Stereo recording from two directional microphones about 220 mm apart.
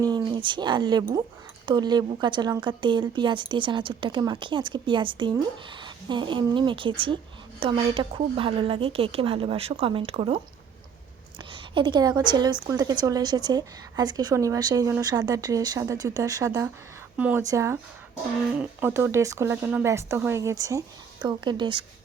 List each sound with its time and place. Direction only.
0.0 s speech: 20° right (ahead or behind)
11.5 s a woman's voice: 20° right (ahead or behind)